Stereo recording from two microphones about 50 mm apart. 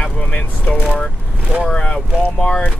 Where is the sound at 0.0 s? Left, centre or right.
Left.